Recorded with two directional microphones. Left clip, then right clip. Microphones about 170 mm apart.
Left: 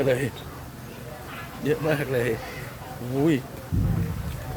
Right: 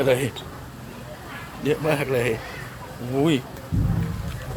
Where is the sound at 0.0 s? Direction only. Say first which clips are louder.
Right 3 dB; 5° right (ahead or behind).